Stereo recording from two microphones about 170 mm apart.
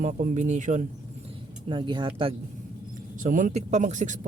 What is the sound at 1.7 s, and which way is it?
Speech, 30° right (ahead or behind).